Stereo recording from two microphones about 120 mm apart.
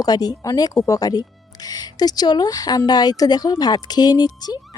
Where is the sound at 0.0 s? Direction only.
30° left (ahead or behind).